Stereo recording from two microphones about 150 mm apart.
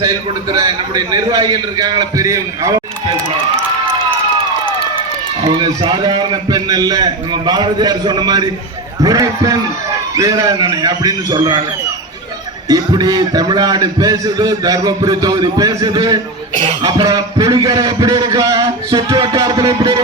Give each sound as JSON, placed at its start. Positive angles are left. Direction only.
{"t": 0.5, "sound": "a man's voice", "side_deg": -25}
{"t": 5.5, "sound": "a man's voice", "side_deg": -30}
{"t": 12.6, "sound": "a man's voice", "side_deg": -25}